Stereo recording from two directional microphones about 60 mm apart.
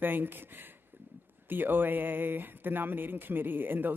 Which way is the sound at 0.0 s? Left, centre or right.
Right.